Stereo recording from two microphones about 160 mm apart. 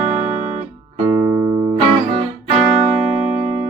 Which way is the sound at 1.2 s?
20° right (ahead or behind).